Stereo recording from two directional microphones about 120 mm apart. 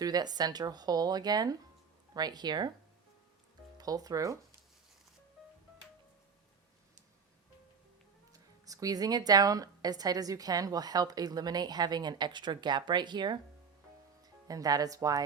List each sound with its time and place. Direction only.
0.0 s speech: 35° right (ahead or behind)
3.8 s speech: 30° right (ahead or behind)
5.4 s music: 5° right (ahead or behind)
8.3 s speech: 30° right (ahead or behind)
14.4 s speech: 30° right (ahead or behind)